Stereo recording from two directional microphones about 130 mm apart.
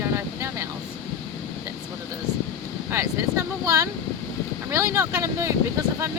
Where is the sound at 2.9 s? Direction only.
20° right (ahead or behind).